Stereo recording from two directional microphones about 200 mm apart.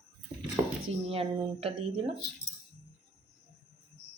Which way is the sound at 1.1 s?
30° right (ahead or behind).